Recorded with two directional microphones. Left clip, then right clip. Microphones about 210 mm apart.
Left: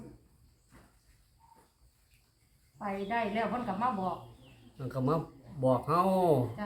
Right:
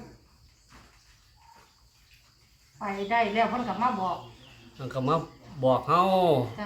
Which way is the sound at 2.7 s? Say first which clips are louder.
Right 7 dB; 50° left (ahead or behind).